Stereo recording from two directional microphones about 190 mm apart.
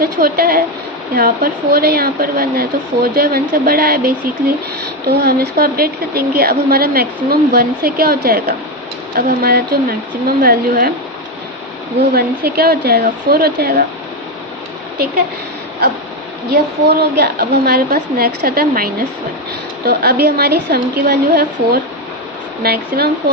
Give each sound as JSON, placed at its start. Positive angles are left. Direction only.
{"t": 0.0, "sound": "a woman's voice", "side_deg": -50}
{"t": 12.1, "sound": "a woman's voice", "side_deg": -55}
{"t": 16.5, "sound": "a woman's voice", "side_deg": -60}